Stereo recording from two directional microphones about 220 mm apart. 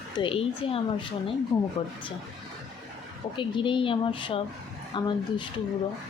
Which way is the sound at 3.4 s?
20° left (ahead or behind).